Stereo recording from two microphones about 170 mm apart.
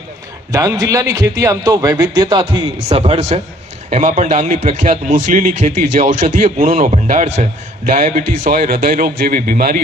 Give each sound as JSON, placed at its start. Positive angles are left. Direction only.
{"t": 0.5, "sound": "a man's voice", "side_deg": -20}